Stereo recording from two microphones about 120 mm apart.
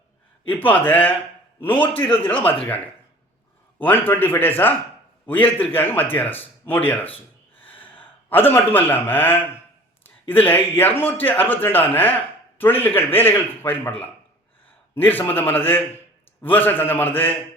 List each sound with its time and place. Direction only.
0.4 s a man's voice: 15° left (ahead or behind)
3.8 s a man's voice: 15° left (ahead or behind)
8.3 s a man's voice: 15° left (ahead or behind)
14.9 s a man's voice: 15° left (ahead or behind)